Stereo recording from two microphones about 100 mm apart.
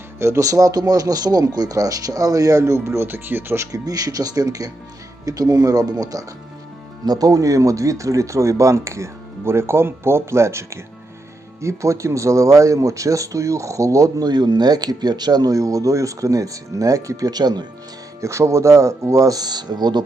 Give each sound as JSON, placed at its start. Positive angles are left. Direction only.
{"t": 0.2, "sound": "speech", "side_deg": -30}
{"t": 18.2, "sound": "speech", "side_deg": -30}